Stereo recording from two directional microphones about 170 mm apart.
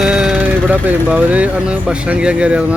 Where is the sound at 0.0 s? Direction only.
5° right (ahead or behind).